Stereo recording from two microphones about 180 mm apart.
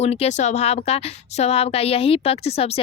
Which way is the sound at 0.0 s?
35° left (ahead or behind).